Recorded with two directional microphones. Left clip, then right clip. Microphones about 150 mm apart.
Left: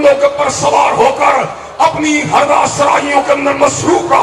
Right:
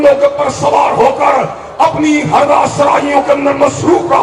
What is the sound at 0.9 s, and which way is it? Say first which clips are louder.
Speech: even; 25° right (ahead or behind).